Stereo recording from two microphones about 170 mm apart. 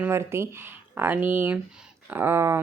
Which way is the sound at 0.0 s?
15° right (ahead or behind).